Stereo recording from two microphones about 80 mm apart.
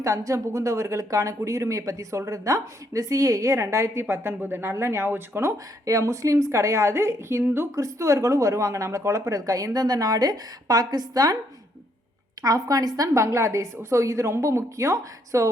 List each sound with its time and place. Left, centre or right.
0.0 s a woman's voice: right
7.8 s speech: right
12.4 s speech: right